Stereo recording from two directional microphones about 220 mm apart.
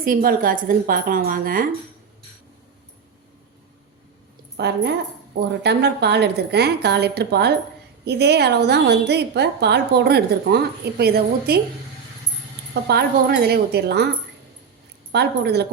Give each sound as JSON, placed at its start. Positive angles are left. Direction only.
{"t": 0.0, "sound": "a woman's voice", "side_deg": -40}
{"t": 4.5, "sound": "a woman's voice", "side_deg": -50}
{"t": 12.9, "sound": "a woman's voice", "side_deg": -45}
{"t": 15.1, "sound": "a woman's voice", "side_deg": -50}